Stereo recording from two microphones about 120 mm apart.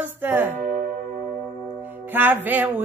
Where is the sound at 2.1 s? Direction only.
15° right (ahead or behind).